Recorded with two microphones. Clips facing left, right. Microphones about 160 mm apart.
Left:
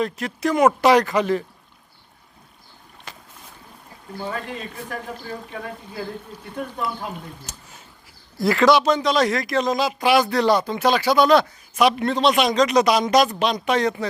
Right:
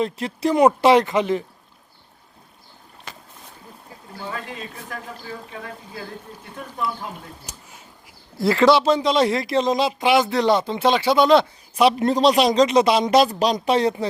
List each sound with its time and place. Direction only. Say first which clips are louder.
0.0 s speech: right 1 dB; 30° right (ahead or behind)
7.5 s speech: even; 10° right (ahead or behind)
8.4 s speech: right 1 dB; 25° right (ahead or behind)